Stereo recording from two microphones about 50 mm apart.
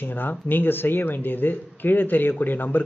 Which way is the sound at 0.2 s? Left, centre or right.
Left.